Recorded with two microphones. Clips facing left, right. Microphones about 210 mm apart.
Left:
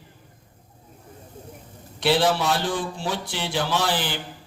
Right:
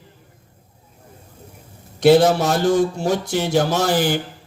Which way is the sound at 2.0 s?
45° right (ahead or behind).